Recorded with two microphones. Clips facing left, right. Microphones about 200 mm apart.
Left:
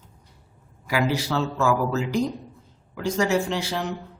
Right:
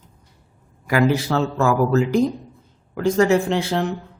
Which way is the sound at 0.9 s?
55° right (ahead or behind).